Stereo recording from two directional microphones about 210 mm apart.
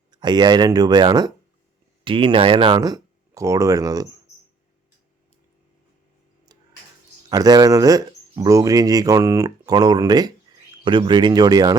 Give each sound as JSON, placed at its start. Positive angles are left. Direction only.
{"t": 0.1, "sound": "speech", "side_deg": -20}
{"t": 7.3, "sound": "speech", "side_deg": -20}